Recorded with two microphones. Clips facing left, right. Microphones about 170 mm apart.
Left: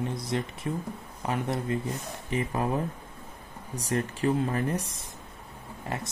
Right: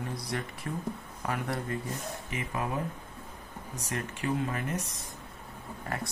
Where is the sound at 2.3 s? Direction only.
35° left (ahead or behind).